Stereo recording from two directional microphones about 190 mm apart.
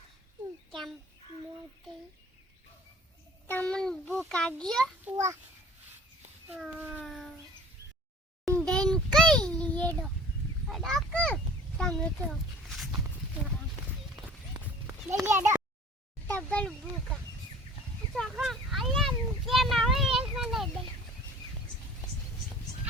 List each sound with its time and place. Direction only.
0.7 s a child's voice: centre (ahead or behind)
3.4 s a child's voice: 10° left (ahead or behind)
5.0 s speech: 15° right (ahead or behind)
6.5 s a child's voice: 5° right (ahead or behind)
8.4 s a sound: 5° left (ahead or behind)
10.7 s a child's voice: centre (ahead or behind)
15.1 s speech: 10° right (ahead or behind)
16.2 s a child's voice: 10° left (ahead or behind)
18.1 s a sound: centre (ahead or behind)